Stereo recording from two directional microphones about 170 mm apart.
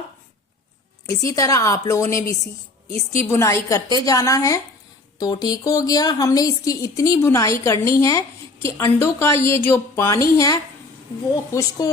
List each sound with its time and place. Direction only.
1.0 s a woman's voice: 20° left (ahead or behind)